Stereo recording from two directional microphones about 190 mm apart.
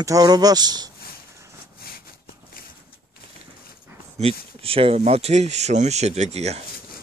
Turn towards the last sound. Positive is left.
turn(degrees=-35)  # may be behind; listen again after turning